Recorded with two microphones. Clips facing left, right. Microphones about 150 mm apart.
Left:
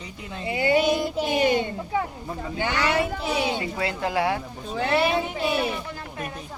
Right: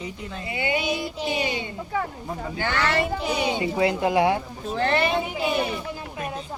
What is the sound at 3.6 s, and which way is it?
Speech, 20° right (ahead or behind).